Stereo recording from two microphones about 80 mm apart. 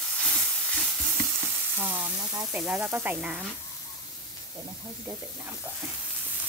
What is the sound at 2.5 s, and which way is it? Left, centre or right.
Speech, centre.